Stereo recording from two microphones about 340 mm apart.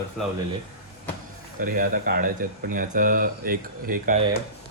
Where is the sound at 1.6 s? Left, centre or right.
Right.